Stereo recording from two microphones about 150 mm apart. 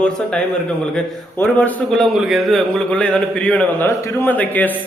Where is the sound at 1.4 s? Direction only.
10° left (ahead or behind).